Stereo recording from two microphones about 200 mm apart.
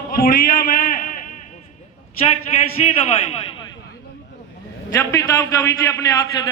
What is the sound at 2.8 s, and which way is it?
Speech, 35° left (ahead or behind).